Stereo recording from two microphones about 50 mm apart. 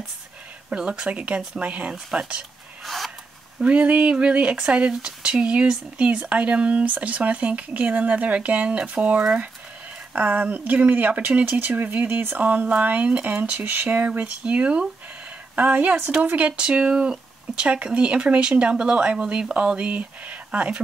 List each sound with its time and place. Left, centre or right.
0.7 s speech: centre
2.8 s snort: centre
3.5 s speech: right
12.4 s speech: right
14.4 s speech: right
15.5 s speech: right